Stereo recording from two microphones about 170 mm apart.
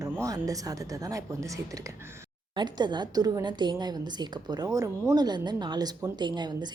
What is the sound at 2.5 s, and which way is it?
A woman's voice, 25° right (ahead or behind).